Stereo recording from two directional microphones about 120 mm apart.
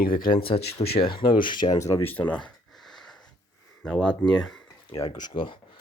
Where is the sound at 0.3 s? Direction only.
45° left (ahead or behind); by 2.0 s 25° left (ahead or behind).